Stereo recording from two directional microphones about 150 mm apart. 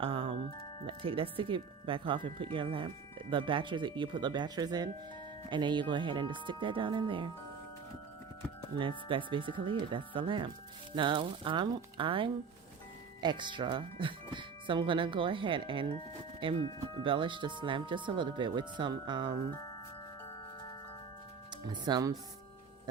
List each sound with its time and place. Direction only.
0.0 s music: 35° right (ahead or behind)
0.9 s speech: 35° right (ahead or behind)
8.8 s speech: 35° right (ahead or behind)
21.7 s speech: 25° right (ahead or behind)